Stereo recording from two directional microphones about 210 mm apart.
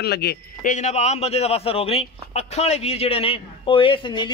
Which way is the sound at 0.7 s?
30° left (ahead or behind).